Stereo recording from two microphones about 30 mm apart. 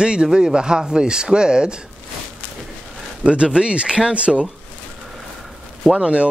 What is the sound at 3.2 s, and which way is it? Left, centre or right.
Speech, right.